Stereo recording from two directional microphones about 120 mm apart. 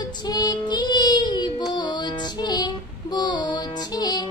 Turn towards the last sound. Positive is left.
turn(degrees=35)  # may be behind; listen again after turning